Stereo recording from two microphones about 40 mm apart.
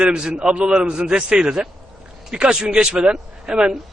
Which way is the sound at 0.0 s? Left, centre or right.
Centre.